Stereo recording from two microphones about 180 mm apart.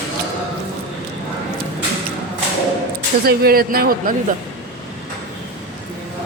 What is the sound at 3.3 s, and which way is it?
Speech, 55° right (ahead or behind).